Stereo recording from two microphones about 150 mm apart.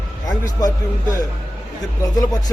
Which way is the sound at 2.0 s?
25° left (ahead or behind).